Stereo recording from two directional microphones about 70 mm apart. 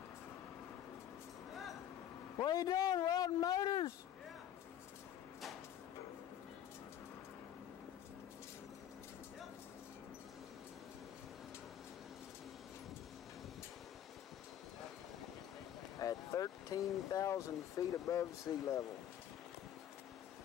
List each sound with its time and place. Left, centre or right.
1.5 s vehicle: centre
2.3 s a sound: left
16.0 s speech: left